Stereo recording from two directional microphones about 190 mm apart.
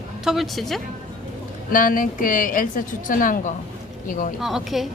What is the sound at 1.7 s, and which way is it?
A woman's voice, 45° left (ahead or behind).